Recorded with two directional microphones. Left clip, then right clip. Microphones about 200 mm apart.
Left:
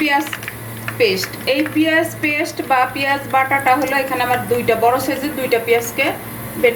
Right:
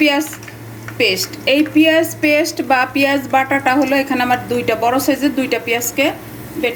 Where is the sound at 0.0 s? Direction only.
55° right (ahead or behind).